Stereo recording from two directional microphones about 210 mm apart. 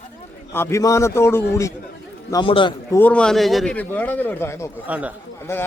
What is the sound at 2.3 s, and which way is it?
Speech, 25° left (ahead or behind).